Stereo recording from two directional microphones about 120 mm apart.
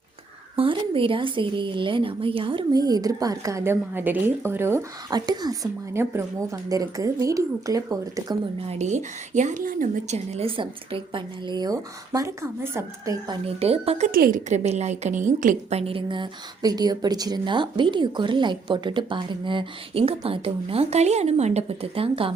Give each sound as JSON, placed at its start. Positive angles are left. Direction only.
{"t": 0.5, "sound": "speech", "side_deg": -50}
{"t": 5.1, "sound": "speech", "side_deg": -35}
{"t": 5.9, "sound": "a woman's voice", "side_deg": -20}
{"t": 8.7, "sound": "speech", "side_deg": -75}
{"t": 10.6, "sound": "a woman's voice", "side_deg": -45}
{"t": 13.4, "sound": "a woman's voice", "side_deg": -55}
{"t": 15.8, "sound": "speech", "side_deg": -50}